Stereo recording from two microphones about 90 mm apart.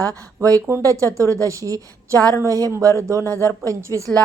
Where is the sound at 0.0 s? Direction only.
40° right (ahead or behind).